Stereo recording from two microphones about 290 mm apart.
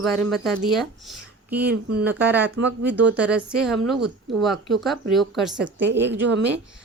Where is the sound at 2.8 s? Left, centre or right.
Centre.